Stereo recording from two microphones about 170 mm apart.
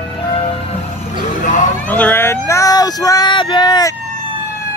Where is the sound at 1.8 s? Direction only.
10° left (ahead or behind).